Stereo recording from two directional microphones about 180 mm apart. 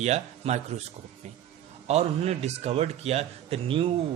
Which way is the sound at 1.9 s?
35° right (ahead or behind).